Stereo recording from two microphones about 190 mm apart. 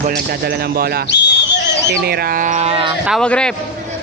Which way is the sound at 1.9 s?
55° right (ahead or behind).